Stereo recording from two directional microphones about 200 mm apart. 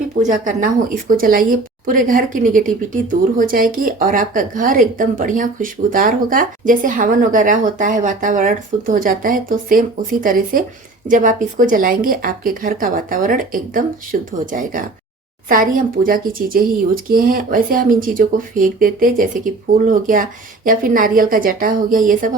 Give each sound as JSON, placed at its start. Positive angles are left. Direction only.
{"t": 0.2, "sound": "a woman's voice", "side_deg": -40}